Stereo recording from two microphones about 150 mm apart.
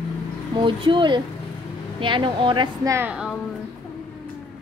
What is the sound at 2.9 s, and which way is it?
Speech, 10° right (ahead or behind).